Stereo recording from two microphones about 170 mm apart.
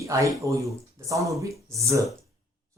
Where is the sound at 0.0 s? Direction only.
20° right (ahead or behind).